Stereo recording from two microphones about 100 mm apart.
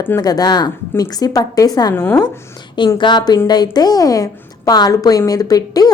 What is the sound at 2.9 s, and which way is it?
A woman's voice, 50° left (ahead or behind).